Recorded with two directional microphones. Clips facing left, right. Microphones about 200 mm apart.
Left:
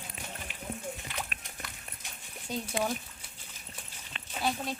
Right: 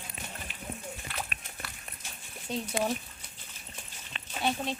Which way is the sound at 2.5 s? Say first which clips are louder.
Right 1 dB; 5° right (ahead or behind).